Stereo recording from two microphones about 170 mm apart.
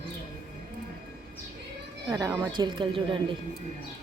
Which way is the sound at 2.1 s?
20° right (ahead or behind).